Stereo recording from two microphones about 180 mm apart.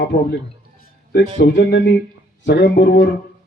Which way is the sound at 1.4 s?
75° left (ahead or behind).